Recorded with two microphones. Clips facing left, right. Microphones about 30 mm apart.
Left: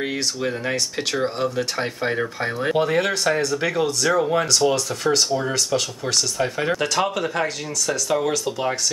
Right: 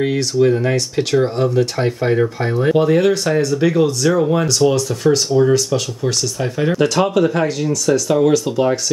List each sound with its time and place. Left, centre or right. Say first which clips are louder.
0.0 s speech: right 9 dB; centre